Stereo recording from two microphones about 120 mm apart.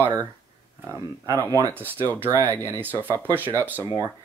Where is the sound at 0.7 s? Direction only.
25° right (ahead or behind).